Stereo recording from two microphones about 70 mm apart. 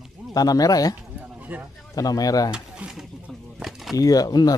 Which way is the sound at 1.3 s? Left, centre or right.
Right.